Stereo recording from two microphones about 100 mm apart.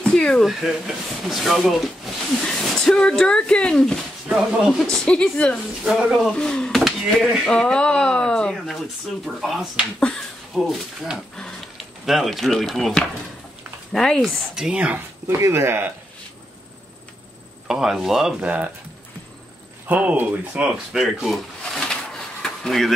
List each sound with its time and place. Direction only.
0.0 s speech: 10° left (ahead or behind)
4.7 s speech: 5° left (ahead or behind)
5.9 s speech: 5° right (ahead or behind)
14.5 s speech: 10° right (ahead or behind)
15.2 s speech: 30° right (ahead or behind)
17.6 s speech: 5° right (ahead or behind)
19.9 s speech: 15° right (ahead or behind); by 22.9 s 5° left (ahead or behind)